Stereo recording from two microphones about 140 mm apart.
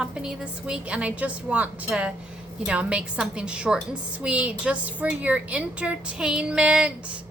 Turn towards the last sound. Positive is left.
turn(degrees=-10)  # may be behind; listen again after turning